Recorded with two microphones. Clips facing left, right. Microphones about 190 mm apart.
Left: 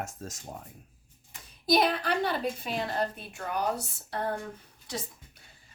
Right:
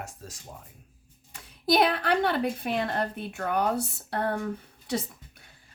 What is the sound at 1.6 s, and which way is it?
A woman's voice, 60° right (ahead or behind).